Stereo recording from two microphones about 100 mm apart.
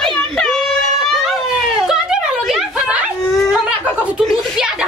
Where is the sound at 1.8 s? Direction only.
5° right (ahead or behind).